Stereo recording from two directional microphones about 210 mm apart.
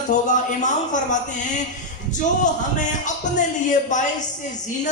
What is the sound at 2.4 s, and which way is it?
A man's voice, 35° left (ahead or behind).